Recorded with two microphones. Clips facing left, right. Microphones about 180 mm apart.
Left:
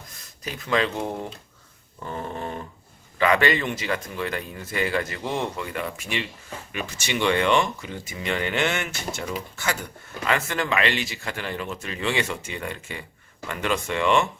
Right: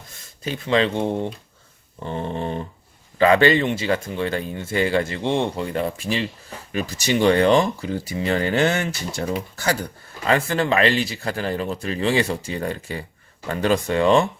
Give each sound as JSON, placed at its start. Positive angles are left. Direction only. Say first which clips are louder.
{"t": 0.4, "sound": "speech", "louder": "right 4 dB", "side_deg": -30}